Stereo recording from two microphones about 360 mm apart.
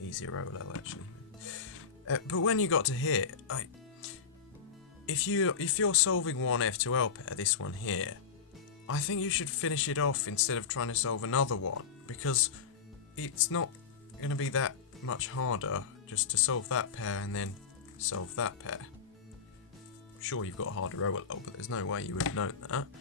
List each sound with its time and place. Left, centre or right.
0.1 s speech: left
20.2 s speech: left